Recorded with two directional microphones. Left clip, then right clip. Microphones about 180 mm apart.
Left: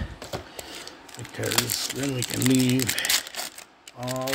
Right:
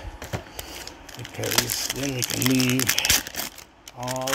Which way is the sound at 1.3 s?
15° left (ahead or behind).